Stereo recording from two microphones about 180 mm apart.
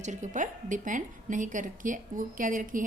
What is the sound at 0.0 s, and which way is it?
A woman's voice, 40° right (ahead or behind).